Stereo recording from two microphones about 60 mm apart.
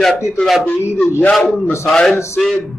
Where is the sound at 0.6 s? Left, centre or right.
Left.